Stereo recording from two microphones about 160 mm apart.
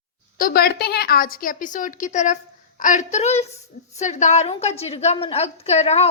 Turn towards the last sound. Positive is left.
turn(degrees=40)  # may be behind; listen again after turning